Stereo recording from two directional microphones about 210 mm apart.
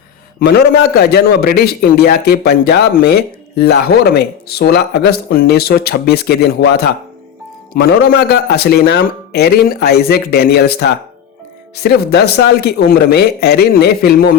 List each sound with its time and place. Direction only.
0.3 s a man's voice: 50° left (ahead or behind)